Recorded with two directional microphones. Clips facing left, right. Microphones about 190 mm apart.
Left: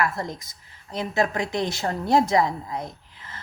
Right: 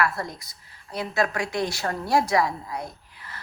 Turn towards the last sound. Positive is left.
turn(degrees=20)  # may be behind; listen again after turning